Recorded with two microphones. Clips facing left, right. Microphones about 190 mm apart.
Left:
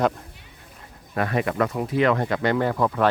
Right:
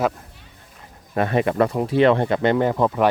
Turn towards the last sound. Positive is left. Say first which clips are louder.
# right 3 dB
turn(degrees=-20)  # may be behind; listen again after turning